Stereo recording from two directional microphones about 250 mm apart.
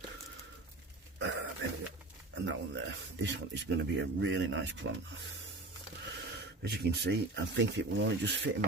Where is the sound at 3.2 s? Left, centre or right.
Right.